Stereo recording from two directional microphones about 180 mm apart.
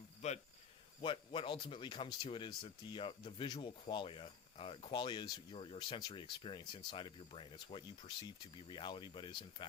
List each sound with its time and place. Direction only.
0.2 s cricket: 40° left (ahead or behind)
1.0 s speech: 30° left (ahead or behind)